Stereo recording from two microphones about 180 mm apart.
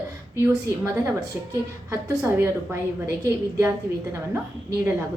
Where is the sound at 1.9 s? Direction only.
15° right (ahead or behind).